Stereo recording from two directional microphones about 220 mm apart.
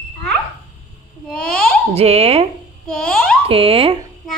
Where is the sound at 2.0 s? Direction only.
30° right (ahead or behind).